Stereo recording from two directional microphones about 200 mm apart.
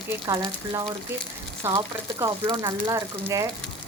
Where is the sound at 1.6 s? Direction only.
15° right (ahead or behind).